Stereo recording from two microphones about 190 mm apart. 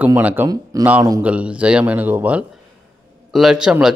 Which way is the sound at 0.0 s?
10° right (ahead or behind).